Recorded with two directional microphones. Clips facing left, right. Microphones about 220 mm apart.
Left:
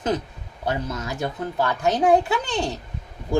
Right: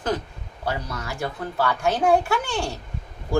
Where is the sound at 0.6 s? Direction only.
20° left (ahead or behind).